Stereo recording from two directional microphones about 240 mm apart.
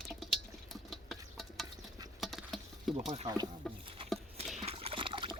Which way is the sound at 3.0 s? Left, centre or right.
Right.